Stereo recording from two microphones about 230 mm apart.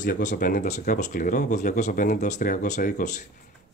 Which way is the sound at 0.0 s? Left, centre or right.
Left.